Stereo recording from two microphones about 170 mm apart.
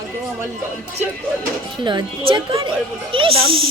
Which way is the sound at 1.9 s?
30° right (ahead or behind).